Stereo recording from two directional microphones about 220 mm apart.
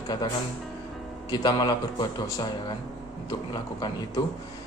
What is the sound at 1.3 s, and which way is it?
Music, 20° left (ahead or behind).